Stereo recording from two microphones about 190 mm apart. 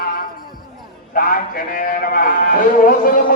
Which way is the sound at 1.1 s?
50° left (ahead or behind).